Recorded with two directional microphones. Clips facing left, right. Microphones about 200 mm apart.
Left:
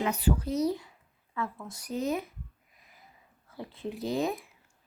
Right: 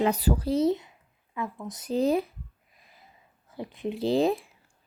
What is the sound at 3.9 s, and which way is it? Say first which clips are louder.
Speech: right 7 dB; 30° right (ahead or behind).